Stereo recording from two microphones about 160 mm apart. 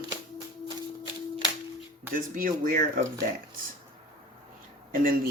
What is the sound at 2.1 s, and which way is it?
Speech, 60° right (ahead or behind).